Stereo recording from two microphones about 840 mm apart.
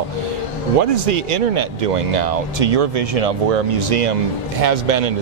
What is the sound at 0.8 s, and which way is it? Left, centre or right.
Speech, right.